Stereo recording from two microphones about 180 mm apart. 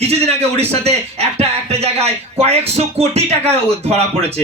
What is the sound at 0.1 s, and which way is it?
Speech, 35° right (ahead or behind).